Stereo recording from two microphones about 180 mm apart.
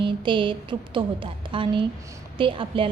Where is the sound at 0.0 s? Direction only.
25° right (ahead or behind).